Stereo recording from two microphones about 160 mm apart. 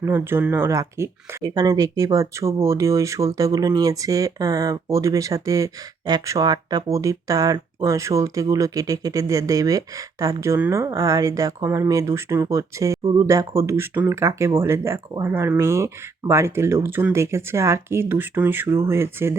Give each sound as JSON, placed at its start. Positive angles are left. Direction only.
{"t": 0.0, "sound": "speech", "side_deg": -15}